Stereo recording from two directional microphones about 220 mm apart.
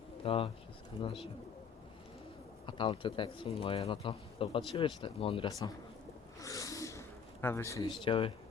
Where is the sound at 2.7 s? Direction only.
20° left (ahead or behind).